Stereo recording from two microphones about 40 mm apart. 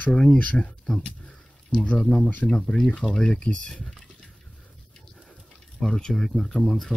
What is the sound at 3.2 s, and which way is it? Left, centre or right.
Speech, left.